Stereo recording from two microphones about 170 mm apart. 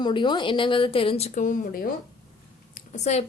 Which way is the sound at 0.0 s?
25° left (ahead or behind).